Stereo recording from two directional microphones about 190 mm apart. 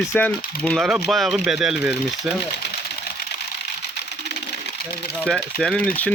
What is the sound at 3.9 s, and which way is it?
Pigeon, 60° left (ahead or behind).